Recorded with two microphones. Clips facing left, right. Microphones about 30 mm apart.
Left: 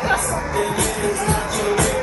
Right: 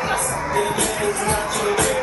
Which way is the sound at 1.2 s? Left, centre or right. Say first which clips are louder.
Even; centre.